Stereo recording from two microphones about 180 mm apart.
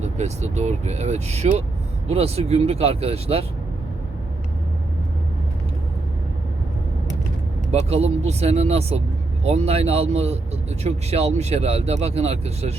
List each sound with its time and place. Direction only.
0.0 s speech: 40° right (ahead or behind)
7.7 s speech: 35° right (ahead or behind)